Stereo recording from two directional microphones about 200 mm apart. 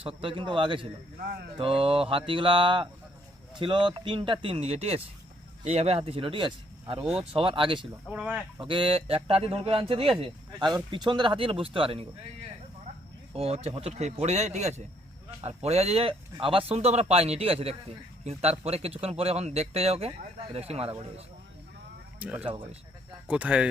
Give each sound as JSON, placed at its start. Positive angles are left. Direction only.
{"t": 0.0, "sound": "a man's voice", "side_deg": -25}
{"t": 8.0, "sound": "speech", "side_deg": -5}
{"t": 8.5, "sound": "a man's voice", "side_deg": -25}
{"t": 13.3, "sound": "speech", "side_deg": -30}
{"t": 22.2, "sound": "speech", "side_deg": -5}